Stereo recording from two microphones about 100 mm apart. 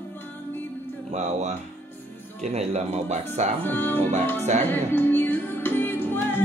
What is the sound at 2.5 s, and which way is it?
Speech, 90° right.